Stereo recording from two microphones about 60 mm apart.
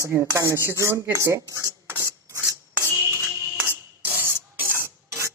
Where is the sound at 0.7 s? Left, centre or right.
Right.